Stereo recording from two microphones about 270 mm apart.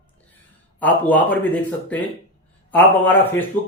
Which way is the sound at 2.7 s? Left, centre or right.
Centre.